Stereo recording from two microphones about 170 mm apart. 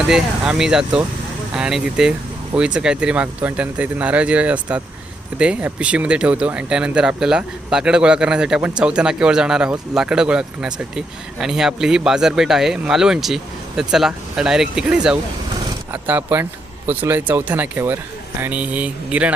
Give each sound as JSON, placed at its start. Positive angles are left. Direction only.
{"t": 0.1, "sound": "speech", "side_deg": -5}